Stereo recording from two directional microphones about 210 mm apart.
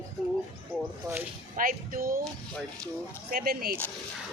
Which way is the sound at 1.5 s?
40° right (ahead or behind).